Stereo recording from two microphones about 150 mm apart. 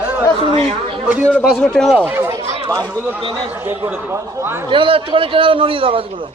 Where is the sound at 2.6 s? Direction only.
25° right (ahead or behind).